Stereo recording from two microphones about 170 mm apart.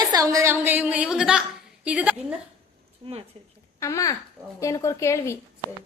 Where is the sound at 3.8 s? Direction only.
20° left (ahead or behind).